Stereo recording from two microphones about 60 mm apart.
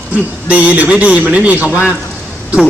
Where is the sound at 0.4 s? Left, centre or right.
Right.